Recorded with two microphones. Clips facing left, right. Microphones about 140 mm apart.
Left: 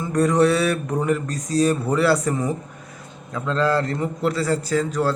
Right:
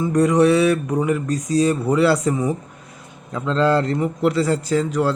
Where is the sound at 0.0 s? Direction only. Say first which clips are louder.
Right 2 dB; 15° right (ahead or behind).